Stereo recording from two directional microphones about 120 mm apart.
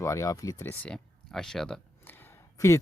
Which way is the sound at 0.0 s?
25° left (ahead or behind).